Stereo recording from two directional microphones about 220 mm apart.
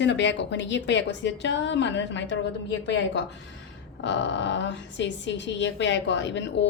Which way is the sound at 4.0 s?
55° left (ahead or behind).